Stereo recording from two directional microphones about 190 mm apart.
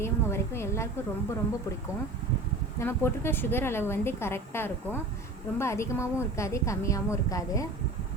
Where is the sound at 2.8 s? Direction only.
15° left (ahead or behind).